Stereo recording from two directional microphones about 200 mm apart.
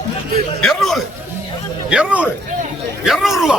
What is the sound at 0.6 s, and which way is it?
A man's voice, centre (ahead or behind).